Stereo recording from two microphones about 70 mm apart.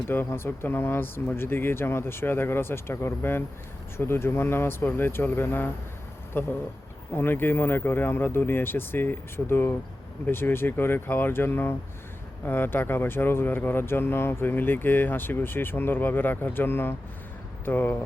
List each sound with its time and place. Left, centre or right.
0.1 s speech: left